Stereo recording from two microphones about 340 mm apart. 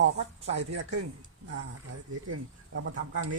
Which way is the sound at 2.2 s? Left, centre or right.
Right.